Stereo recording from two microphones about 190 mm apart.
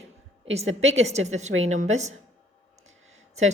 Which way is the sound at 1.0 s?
35° right (ahead or behind).